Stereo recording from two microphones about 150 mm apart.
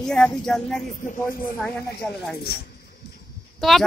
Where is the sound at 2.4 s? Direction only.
90° left.